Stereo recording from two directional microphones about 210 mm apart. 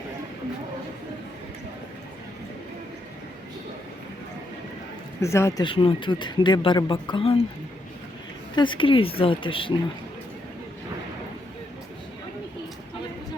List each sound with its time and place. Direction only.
5.2 s speech: 15° left (ahead or behind)
8.5 s speech: 25° left (ahead or behind)